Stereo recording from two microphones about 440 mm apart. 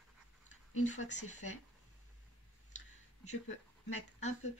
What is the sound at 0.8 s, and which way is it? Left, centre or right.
Speech, centre.